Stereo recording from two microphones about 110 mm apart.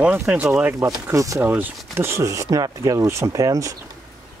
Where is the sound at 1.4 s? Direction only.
15° right (ahead or behind).